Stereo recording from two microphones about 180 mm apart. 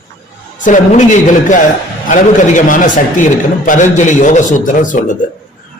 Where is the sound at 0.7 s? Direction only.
40° left (ahead or behind).